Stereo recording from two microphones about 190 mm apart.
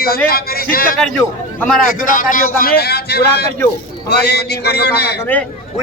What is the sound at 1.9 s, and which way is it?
A man's voice, 45° left (ahead or behind).